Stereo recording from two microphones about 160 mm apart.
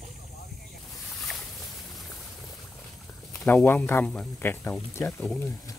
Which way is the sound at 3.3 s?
20° left (ahead or behind).